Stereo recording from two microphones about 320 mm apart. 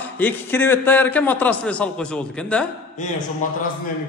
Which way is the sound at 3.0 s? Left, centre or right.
Left.